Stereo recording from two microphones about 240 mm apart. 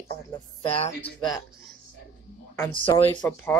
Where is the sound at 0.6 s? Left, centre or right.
Left.